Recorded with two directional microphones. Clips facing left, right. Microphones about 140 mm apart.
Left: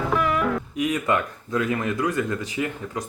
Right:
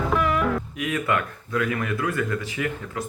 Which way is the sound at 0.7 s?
20° left (ahead or behind).